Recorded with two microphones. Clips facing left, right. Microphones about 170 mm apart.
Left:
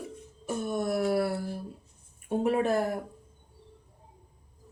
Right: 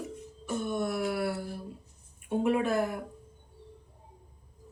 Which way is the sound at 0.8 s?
40° left (ahead or behind).